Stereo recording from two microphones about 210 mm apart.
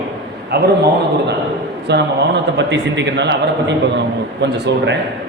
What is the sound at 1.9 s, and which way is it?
A man's voice, 55° right (ahead or behind).